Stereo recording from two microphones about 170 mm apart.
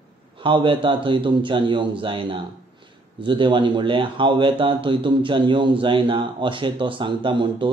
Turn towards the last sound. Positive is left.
turn(degrees=-30)  # may be behind; listen again after turning